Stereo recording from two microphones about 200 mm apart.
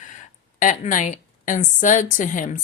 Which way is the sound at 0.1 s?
40° left (ahead or behind).